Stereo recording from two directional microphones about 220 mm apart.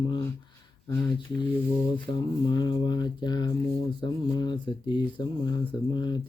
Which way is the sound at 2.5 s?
20° left (ahead or behind).